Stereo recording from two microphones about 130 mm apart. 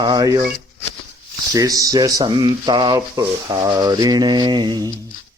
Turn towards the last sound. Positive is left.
turn(degrees=-35)  # may be behind; listen again after turning